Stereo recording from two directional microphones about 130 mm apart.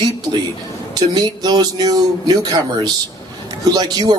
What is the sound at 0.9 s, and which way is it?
A man's voice, 30° right (ahead or behind).